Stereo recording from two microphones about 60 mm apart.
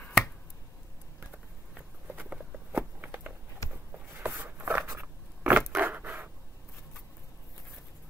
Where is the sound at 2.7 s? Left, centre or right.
Right.